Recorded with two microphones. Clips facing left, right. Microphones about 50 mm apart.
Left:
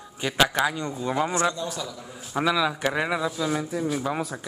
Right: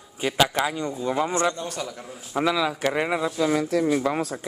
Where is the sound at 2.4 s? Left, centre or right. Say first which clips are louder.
Even; centre.